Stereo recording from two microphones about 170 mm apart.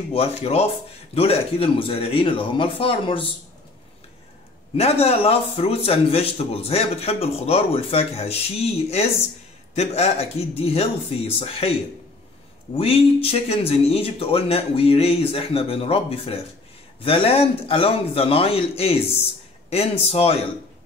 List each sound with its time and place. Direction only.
0.1 s a man's voice: 35° left (ahead or behind)
4.7 s a man's voice: 40° left (ahead or behind)
12.7 s a man's voice: 35° left (ahead or behind)